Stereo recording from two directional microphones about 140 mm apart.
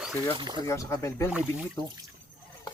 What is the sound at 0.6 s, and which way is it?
Speech, 20° left (ahead or behind).